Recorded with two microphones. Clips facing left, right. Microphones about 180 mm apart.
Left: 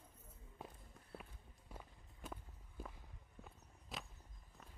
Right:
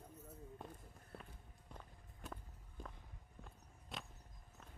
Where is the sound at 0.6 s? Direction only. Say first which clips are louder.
Right 2 dB; centre (ahead or behind).